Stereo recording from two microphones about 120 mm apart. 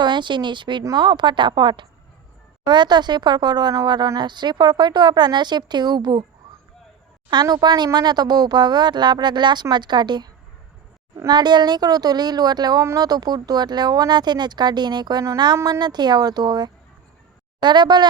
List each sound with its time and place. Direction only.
0.0 s speech: 40° right (ahead or behind)
7.4 s speech: 35° right (ahead or behind)